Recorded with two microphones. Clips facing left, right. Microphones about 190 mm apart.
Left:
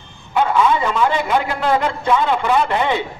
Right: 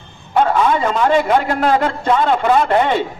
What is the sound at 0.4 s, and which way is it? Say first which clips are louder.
A man's voice: right 1 dB; 45° right (ahead or behind).